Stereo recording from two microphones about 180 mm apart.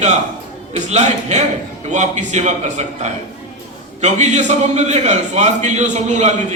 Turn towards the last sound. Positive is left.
turn(degrees=-40)  # may be behind; listen again after turning